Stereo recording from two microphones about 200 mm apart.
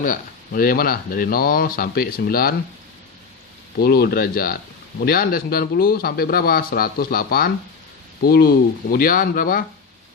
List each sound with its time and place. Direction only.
0.0 s speech: 45° left (ahead or behind)
3.8 s speech: 50° left (ahead or behind)